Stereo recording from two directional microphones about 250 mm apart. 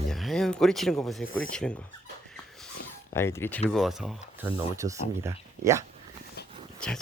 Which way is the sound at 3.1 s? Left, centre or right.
Centre.